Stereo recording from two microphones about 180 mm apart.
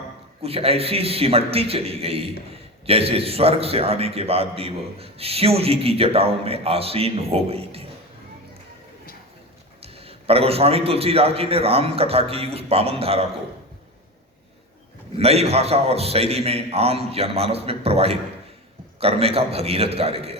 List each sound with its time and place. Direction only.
0.4 s a man's voice: 35° right (ahead or behind)
9.8 s a man's voice: 35° right (ahead or behind)
15.2 s a man's voice: 35° right (ahead or behind)